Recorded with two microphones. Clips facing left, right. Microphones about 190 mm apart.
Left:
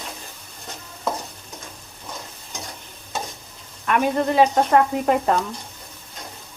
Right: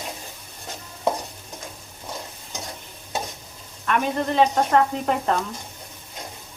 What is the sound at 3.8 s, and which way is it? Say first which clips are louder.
Speech: left 3 dB; 10° left (ahead or behind).